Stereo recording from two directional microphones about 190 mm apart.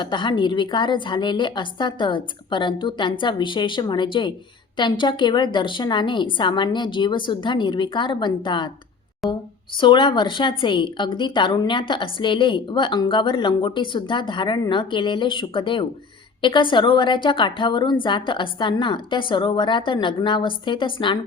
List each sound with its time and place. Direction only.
0.0 s a woman's voice: 25° left (ahead or behind)
9.2 s a woman's voice: centre (ahead or behind)
9.7 s a woman's voice: 25° left (ahead or behind)